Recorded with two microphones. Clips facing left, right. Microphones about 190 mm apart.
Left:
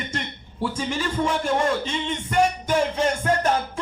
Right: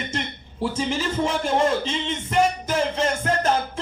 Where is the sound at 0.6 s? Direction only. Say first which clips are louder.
Right 1 dB; 25° right (ahead or behind).